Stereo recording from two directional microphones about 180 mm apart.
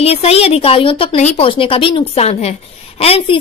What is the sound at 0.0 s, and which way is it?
A woman's voice, 35° left (ahead or behind).